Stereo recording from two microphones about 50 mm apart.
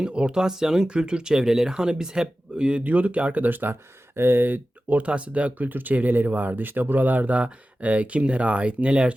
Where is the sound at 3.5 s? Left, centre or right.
Right.